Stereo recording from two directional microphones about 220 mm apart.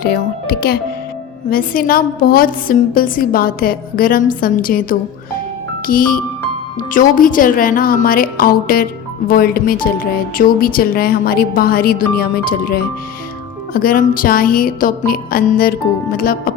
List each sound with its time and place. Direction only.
0.0 s a woman's voice: 45° left (ahead or behind)